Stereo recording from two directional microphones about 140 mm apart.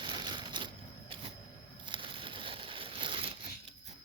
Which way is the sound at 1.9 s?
35° right (ahead or behind).